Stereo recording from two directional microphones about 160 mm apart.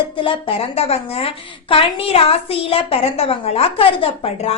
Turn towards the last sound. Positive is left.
turn(degrees=40)  # may be behind; listen again after turning